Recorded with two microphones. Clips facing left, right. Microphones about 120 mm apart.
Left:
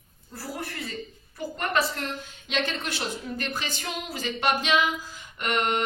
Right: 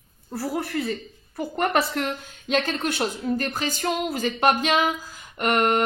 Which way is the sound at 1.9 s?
55° right (ahead or behind).